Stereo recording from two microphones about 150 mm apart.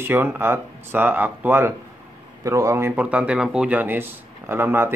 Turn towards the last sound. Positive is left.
turn(degrees=-15)  # may be behind; listen again after turning